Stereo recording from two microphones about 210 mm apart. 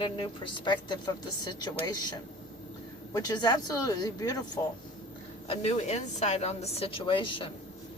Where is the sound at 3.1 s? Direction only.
15° left (ahead or behind).